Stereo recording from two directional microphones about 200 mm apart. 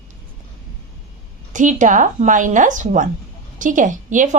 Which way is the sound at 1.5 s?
40° right (ahead or behind).